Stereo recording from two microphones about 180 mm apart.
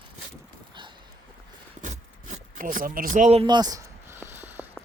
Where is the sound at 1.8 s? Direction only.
45° right (ahead or behind).